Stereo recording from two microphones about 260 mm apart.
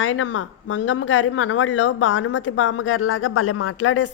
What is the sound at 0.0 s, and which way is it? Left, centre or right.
Speech, left.